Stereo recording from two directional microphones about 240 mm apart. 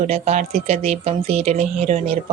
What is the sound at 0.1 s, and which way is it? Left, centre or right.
Speech, right.